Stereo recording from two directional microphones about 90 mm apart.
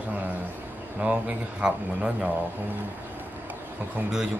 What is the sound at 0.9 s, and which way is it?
Speech, 15° right (ahead or behind).